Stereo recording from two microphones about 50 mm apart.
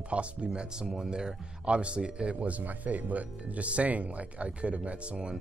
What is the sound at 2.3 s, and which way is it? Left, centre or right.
Speech, right.